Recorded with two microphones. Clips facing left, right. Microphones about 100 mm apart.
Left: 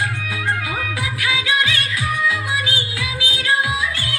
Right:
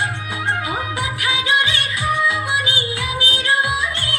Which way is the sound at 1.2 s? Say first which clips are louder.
Even; 25° right (ahead or behind).